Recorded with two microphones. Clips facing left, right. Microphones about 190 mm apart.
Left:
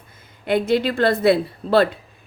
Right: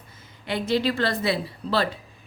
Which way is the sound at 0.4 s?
50° left (ahead or behind).